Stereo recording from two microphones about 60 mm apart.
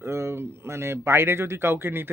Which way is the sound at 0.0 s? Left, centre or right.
Right.